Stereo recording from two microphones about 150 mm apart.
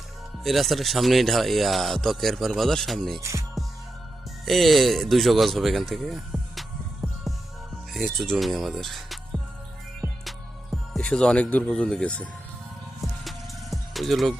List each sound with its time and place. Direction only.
0.4 s speech: centre (ahead or behind)
3.2 s music: 20° right (ahead or behind)
4.4 s speech: centre (ahead or behind)
10.9 s speech: 5° left (ahead or behind)
13.0 s music: centre (ahead or behind)